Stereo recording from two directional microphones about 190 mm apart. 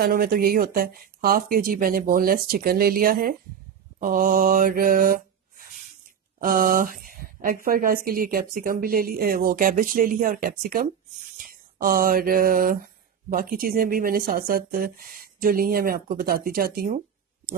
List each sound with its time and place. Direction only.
0.0 s a woman's voice: 50° right (ahead or behind)
6.4 s a woman's voice: 45° right (ahead or behind)
11.3 s a sound: 45° right (ahead or behind)
13.3 s a woman's voice: 50° right (ahead or behind)